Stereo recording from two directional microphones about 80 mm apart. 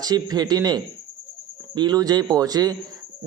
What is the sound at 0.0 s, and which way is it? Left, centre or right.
Speech, right.